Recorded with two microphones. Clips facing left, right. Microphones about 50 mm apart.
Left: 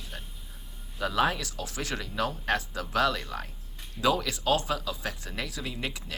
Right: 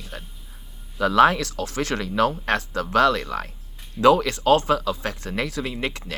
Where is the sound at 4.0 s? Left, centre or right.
Right.